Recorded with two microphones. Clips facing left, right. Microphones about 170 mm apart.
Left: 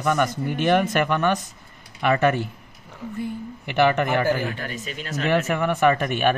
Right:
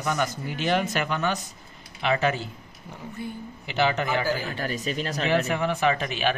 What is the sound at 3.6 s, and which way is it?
Speech, 60° left (ahead or behind).